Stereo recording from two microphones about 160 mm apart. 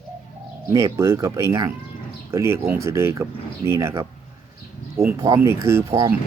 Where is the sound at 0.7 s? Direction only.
20° right (ahead or behind).